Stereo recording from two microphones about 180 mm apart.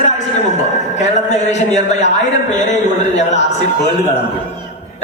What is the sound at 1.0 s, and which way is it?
A man's voice, 40° left (ahead or behind).